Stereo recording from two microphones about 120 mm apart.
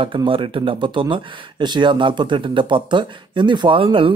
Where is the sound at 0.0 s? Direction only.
45° right (ahead or behind).